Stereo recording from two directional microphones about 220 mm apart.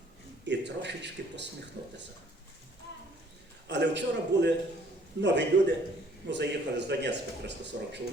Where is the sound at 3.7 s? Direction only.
50° right (ahead or behind).